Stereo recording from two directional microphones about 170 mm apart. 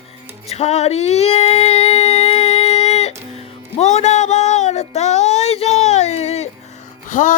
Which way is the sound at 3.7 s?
40° left (ahead or behind).